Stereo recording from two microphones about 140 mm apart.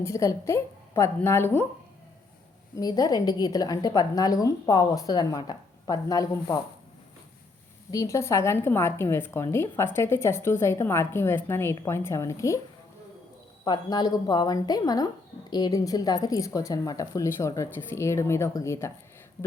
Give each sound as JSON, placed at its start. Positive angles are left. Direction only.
{"t": 0.0, "sound": "speech", "side_deg": 20}
{"t": 2.7, "sound": "speech", "side_deg": 25}
{"t": 7.9, "sound": "a woman's voice", "side_deg": 20}
{"t": 13.7, "sound": "speech", "side_deg": 30}